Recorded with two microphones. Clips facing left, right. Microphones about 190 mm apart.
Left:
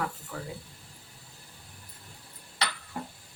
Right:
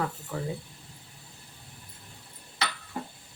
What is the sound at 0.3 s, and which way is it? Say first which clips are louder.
Speech: right 5 dB; 20° right (ahead or behind).